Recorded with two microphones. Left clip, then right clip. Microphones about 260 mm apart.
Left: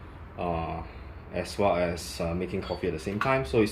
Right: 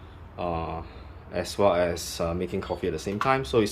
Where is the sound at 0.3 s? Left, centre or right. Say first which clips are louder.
Right 1 dB; centre.